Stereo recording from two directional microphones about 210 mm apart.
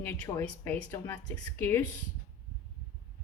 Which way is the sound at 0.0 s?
10° left (ahead or behind).